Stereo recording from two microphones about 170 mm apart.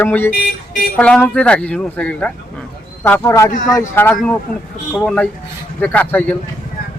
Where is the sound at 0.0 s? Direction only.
10° left (ahead or behind).